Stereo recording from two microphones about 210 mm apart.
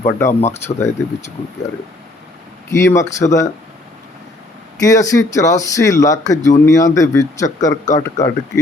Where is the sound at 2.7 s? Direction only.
15° left (ahead or behind).